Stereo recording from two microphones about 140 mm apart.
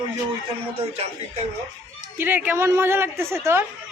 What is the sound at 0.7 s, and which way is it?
Speech, 45° right (ahead or behind).